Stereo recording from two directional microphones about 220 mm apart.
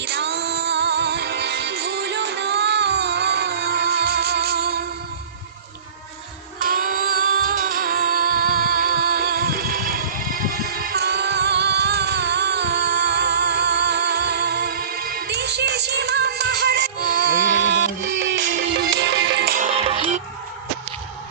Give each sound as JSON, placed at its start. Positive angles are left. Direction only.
{"t": 0.0, "sound": "music", "side_deg": -50}
{"t": 6.6, "sound": "music", "side_deg": -40}
{"t": 19.5, "sound": "music", "side_deg": -30}